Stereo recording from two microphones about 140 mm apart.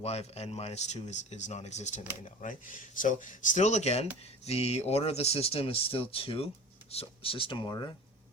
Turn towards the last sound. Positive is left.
turn(degrees=35)  # may be behind; listen again after turning